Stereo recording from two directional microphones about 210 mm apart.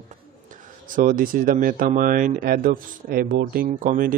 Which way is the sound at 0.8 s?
40° right (ahead or behind).